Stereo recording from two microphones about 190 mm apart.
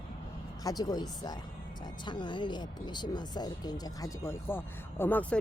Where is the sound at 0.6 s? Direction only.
20° left (ahead or behind).